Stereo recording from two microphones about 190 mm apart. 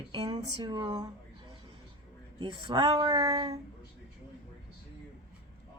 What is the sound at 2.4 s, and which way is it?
Speech, 25° right (ahead or behind).